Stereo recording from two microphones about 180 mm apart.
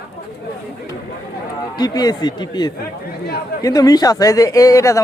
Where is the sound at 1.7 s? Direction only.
20° left (ahead or behind).